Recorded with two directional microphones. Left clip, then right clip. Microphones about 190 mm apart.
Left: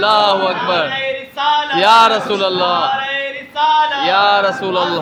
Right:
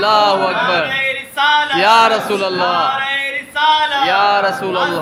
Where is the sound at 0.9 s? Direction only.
40° left (ahead or behind).